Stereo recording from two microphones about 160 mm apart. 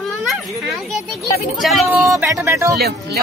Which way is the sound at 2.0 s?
20° right (ahead or behind).